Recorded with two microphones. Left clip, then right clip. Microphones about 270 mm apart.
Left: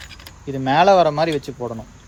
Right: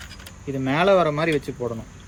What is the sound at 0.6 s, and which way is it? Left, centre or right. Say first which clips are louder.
Speech: left 5 dB; left.